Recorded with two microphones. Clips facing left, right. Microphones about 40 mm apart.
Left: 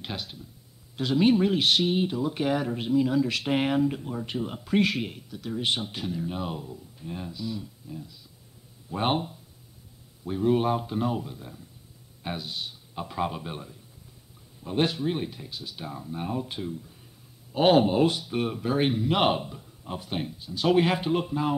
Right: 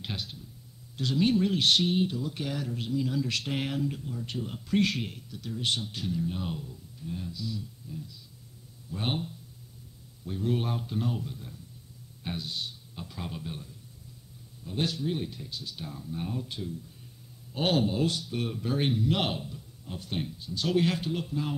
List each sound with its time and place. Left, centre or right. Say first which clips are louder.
0.0 s a sound: left 2 dB; centre
0.9 s speech: left 4 dB; centre
3.1 s speech: left 6 dB; centre
5.5 s speech: left 3 dB; left
12.9 s a man's voice: left 15 dB; left
14.9 s speech: left 3 dB; left
19.3 s a man's voice: left 6 dB; left
20.0 s speech: even; centre
20.6 s speech: left 5 dB; left